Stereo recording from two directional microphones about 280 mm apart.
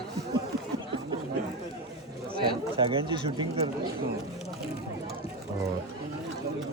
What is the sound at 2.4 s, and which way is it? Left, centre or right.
Speech, centre.